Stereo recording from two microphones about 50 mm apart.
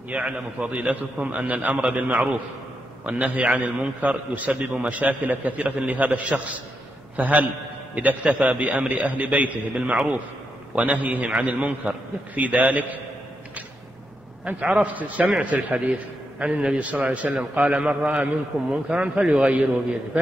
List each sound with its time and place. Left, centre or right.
0.1 s a man's voice: right
14.4 s a man's voice: right